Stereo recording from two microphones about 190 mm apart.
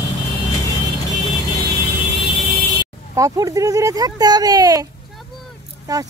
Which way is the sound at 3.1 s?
15° right (ahead or behind).